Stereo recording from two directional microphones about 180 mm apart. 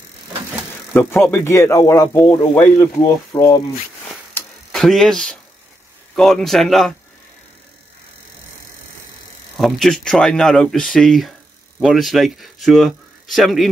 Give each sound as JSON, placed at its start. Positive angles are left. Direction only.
{"t": 0.9, "sound": "speech", "side_deg": 10}
{"t": 4.3, "sound": "a sound", "side_deg": 5}
{"t": 6.1, "sound": "speech", "side_deg": 0}
{"t": 9.6, "sound": "a man's voice", "side_deg": 0}